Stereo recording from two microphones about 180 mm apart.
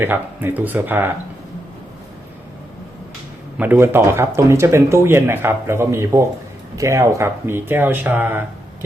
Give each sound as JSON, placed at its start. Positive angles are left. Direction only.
{"t": 0.0, "sound": "speech", "side_deg": -10}
{"t": 3.6, "sound": "speech", "side_deg": -10}